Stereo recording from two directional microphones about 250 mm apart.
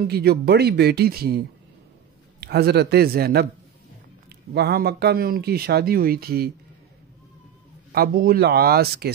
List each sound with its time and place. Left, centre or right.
0.0 s speech: right
2.4 s speech: right
7.9 s speech: right